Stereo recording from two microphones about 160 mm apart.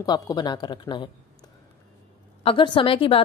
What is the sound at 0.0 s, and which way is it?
Speech, 25° left (ahead or behind).